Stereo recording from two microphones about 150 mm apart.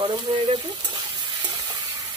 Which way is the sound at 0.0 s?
30° right (ahead or behind).